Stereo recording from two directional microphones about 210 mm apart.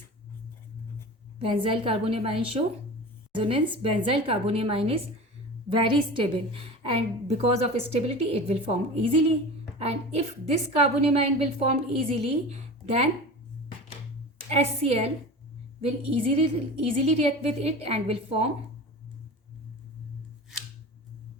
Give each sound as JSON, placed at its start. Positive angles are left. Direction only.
{"t": 1.4, "sound": "a woman's voice", "side_deg": -25}
{"t": 14.5, "sound": "a woman's voice", "side_deg": -30}